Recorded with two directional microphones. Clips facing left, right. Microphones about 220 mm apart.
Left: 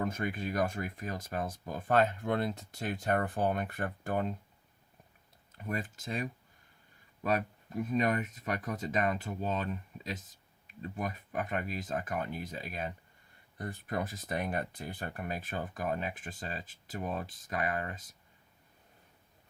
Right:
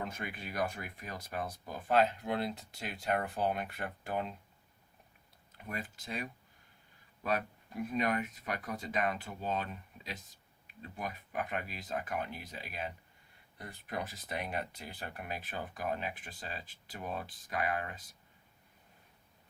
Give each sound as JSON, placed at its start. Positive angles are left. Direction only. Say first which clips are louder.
{"t": 0.0, "sound": "speech", "louder": "left 7 dB", "side_deg": 45}
{"t": 5.5, "sound": "speech", "louder": "left 5 dB", "side_deg": 45}